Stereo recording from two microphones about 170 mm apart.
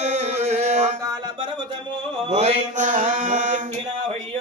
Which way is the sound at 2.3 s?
40° right (ahead or behind).